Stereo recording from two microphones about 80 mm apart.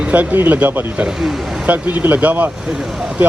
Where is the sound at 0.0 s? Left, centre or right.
Centre.